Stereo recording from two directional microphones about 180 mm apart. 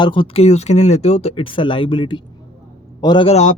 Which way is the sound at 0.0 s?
25° left (ahead or behind).